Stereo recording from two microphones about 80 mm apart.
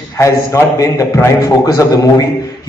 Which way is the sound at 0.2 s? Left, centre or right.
Left.